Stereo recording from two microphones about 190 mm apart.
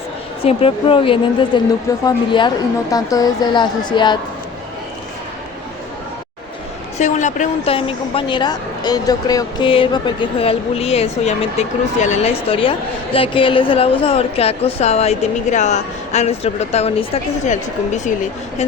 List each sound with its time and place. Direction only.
0.4 s a woman's voice: 30° left (ahead or behind)
7.0 s a woman's voice: 40° left (ahead or behind)